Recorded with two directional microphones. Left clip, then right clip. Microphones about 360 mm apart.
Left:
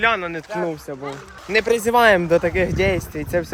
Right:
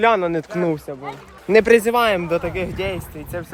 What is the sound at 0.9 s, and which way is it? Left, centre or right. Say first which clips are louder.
Speech: even; centre.